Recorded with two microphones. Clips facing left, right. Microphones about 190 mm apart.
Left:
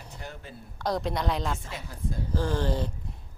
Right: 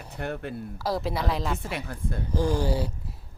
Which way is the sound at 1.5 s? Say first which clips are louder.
Right 7 dB; 60° right (ahead or behind).